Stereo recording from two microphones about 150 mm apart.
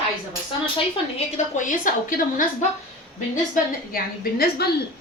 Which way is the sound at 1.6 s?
60° left (ahead or behind).